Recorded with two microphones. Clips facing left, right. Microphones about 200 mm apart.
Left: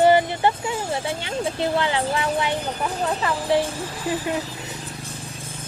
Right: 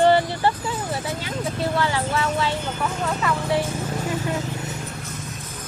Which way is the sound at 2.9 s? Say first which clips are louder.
Even; 35° left (ahead or behind).